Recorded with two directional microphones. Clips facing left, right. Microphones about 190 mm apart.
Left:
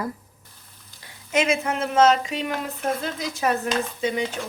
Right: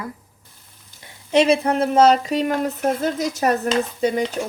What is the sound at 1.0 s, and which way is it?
Speech, 30° right (ahead or behind).